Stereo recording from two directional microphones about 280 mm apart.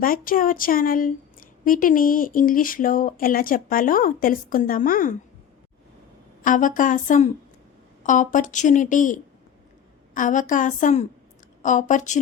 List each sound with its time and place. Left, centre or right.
0.0 s speech: left
6.4 s speech: left